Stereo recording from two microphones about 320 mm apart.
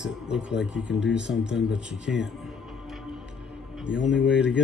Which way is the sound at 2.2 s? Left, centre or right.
Centre.